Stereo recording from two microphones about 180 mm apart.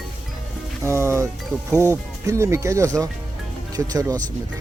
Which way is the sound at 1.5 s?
5° left (ahead or behind).